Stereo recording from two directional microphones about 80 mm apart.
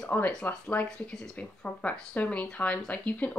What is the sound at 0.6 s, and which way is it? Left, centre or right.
A woman's voice, centre.